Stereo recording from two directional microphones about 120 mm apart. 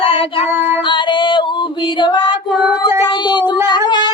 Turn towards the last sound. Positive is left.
turn(degrees=35)  # may be behind; listen again after turning